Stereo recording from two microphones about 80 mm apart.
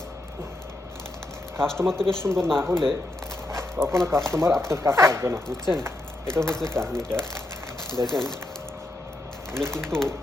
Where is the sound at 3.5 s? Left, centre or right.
Right.